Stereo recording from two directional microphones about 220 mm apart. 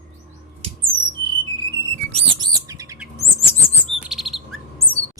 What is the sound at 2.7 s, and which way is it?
Chirp, 15° right (ahead or behind).